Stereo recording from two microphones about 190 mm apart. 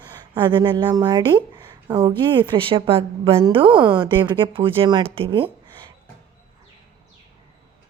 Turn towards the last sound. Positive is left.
turn(degrees=-25)  # may be behind; listen again after turning